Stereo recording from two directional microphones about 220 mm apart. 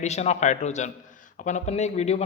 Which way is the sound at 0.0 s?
30° left (ahead or behind).